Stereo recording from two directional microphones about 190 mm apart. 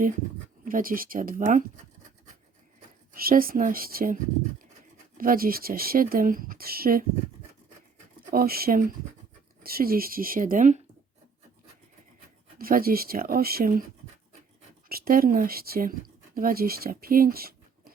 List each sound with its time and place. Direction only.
0.6 s speech: 50° right (ahead or behind)
3.1 s speech: 50° right (ahead or behind)
8.3 s speech: 50° right (ahead or behind)
12.5 s speech: 50° right (ahead or behind)
14.8 s speech: 50° right (ahead or behind)